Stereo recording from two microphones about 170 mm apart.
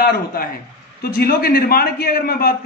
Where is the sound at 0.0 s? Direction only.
60° left (ahead or behind).